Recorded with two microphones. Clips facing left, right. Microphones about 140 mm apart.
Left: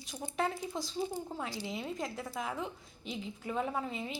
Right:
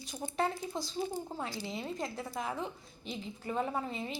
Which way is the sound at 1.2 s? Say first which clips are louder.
Even; 10° right (ahead or behind).